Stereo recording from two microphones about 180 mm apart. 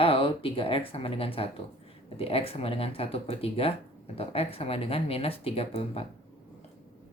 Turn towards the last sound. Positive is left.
turn(degrees=35)  # may be behind; listen again after turning